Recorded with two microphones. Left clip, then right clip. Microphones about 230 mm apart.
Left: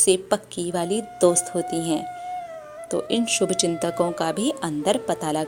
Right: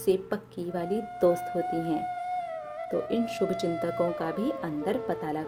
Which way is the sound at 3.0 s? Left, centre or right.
Centre.